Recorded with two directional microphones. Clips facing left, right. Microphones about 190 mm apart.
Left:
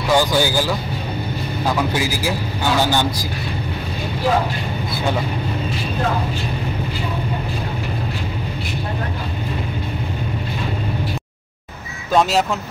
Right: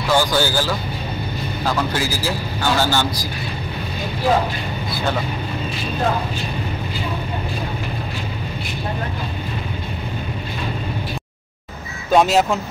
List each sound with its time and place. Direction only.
0.1 s speech: 15° left (ahead or behind)
1.8 s a man's voice: 15° left (ahead or behind)
12.1 s speech: 5° right (ahead or behind)